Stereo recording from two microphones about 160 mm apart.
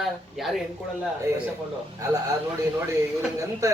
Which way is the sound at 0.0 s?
Centre (ahead or behind).